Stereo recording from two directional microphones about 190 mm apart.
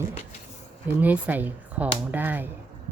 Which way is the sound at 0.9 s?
10° right (ahead or behind).